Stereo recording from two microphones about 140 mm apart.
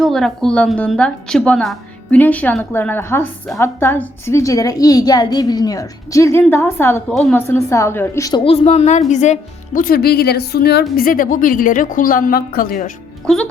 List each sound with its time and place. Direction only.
0.0 s a woman's voice: 5° left (ahead or behind); by 8.3 s 20° left (ahead or behind)
8.4 s speech: 45° left (ahead or behind); by 12.9 s 90° left
13.2 s a child's voice: 5° left (ahead or behind)